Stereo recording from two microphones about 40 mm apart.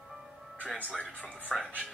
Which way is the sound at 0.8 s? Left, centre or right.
Left.